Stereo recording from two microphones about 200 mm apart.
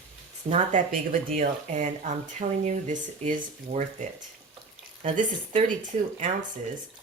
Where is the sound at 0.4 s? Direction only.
35° right (ahead or behind).